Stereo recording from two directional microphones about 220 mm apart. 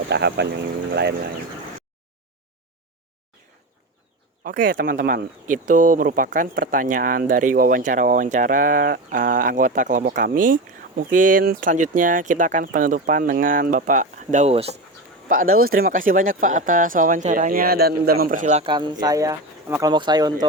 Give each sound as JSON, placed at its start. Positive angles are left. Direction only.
{"t": 0.1, "sound": "speech", "side_deg": -50}
{"t": 4.4, "sound": "speech", "side_deg": -40}
{"t": 15.5, "sound": "speech", "side_deg": -40}
{"t": 18.7, "sound": "speech", "side_deg": -20}